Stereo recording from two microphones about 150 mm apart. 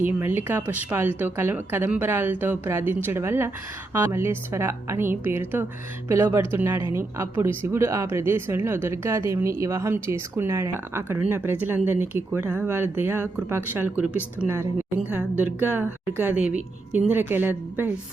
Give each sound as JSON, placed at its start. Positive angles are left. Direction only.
{"t": 0.0, "sound": "speech", "side_deg": -15}